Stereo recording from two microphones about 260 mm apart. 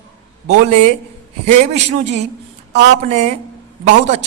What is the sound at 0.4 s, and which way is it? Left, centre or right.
A woman's voice, right.